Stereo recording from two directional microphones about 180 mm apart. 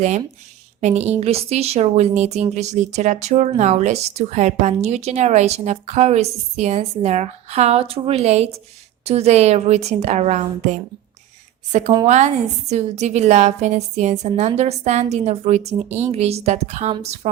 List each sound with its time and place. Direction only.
0.8 s a woman's voice: 40° right (ahead or behind)
12.0 s a woman's voice: 40° right (ahead or behind)